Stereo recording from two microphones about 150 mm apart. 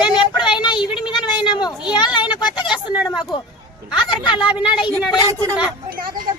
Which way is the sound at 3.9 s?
30° left (ahead or behind).